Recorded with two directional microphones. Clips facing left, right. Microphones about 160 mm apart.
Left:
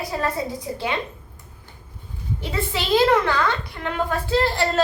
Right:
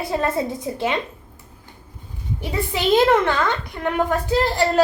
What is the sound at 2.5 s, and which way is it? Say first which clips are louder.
A child's voice: right 3 dB; 20° right (ahead or behind).